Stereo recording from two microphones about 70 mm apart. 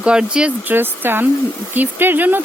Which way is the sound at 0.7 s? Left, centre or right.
Right.